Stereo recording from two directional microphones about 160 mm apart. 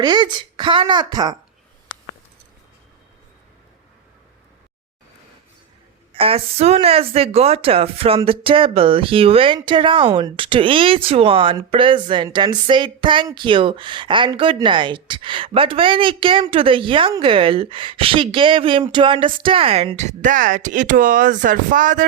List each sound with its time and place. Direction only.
0.0 s a woman's voice: 25° right (ahead or behind)
6.1 s speech: 35° right (ahead or behind); by 22.0 s 55° right (ahead or behind)